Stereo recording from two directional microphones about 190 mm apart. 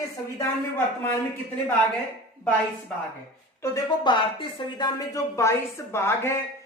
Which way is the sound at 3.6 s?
25° left (ahead or behind).